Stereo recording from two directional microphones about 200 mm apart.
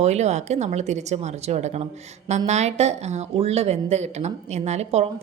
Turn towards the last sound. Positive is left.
turn(degrees=-30)  # may be behind; listen again after turning